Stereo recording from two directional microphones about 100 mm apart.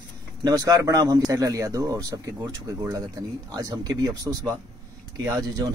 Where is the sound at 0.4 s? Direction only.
40° right (ahead or behind).